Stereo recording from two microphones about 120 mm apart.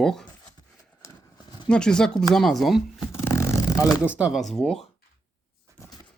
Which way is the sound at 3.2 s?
25° left (ahead or behind).